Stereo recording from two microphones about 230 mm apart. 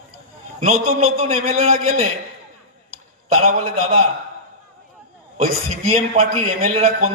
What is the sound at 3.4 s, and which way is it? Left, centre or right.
Speech, right.